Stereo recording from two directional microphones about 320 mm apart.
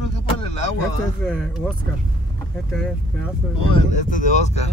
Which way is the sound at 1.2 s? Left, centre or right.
Centre.